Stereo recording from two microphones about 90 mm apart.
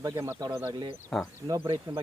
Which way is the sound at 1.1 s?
5° left (ahead or behind).